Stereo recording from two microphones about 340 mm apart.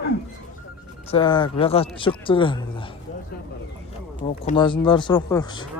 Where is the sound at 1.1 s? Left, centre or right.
Centre.